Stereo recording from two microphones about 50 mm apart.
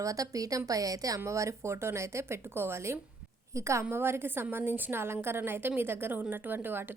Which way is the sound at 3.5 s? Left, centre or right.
Right.